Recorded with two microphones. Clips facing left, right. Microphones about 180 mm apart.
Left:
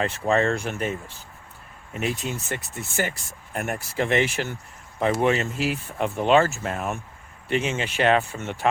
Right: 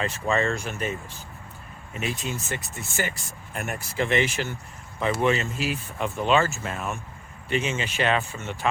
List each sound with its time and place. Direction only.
0.0 s speech: 55° left (ahead or behind)